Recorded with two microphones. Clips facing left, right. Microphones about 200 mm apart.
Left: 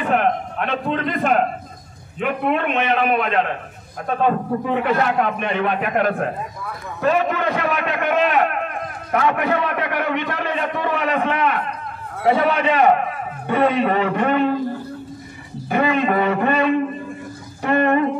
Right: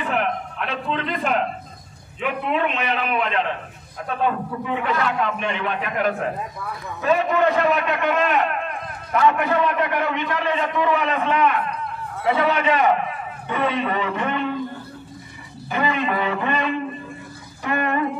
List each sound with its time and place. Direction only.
0.0 s a man's voice: 50° left (ahead or behind)
4.3 s a man's voice: 45° left (ahead or behind)
15.7 s a man's voice: 50° left (ahead or behind)